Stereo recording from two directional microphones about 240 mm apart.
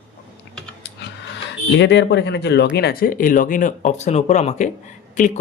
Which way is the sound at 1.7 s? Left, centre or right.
Left.